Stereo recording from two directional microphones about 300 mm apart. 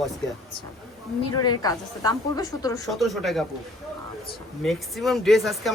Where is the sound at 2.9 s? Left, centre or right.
Centre.